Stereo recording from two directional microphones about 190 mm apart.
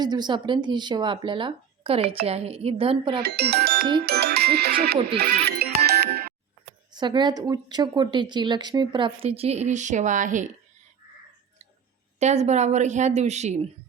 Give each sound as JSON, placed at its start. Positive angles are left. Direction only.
{"t": 0.0, "sound": "speech", "side_deg": -20}
{"t": 3.2, "sound": "speech", "side_deg": -60}
{"t": 6.9, "sound": "speech", "side_deg": -25}
{"t": 12.2, "sound": "a woman's voice", "side_deg": -35}